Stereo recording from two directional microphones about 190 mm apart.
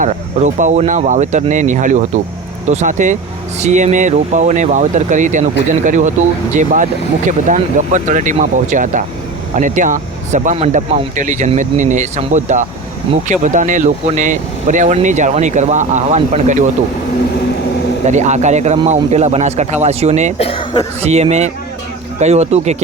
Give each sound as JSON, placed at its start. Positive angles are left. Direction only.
{"t": 0.0, "sound": "speech", "side_deg": -40}
{"t": 18.0, "sound": "speech", "side_deg": -40}
{"t": 20.4, "sound": "speech", "side_deg": 25}
{"t": 21.0, "sound": "speech", "side_deg": -35}